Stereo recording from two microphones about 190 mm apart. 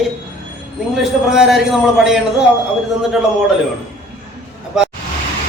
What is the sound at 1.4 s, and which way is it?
Speech, centre (ahead or behind).